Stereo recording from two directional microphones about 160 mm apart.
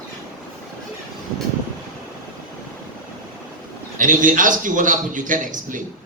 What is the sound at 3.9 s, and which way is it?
A man's voice, 55° right (ahead or behind).